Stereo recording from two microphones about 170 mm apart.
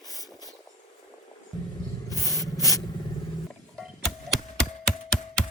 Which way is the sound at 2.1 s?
20° left (ahead or behind).